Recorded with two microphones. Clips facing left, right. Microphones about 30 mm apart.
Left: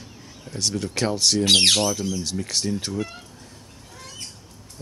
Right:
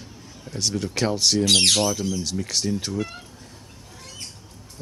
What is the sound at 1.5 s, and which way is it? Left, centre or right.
Speech, centre.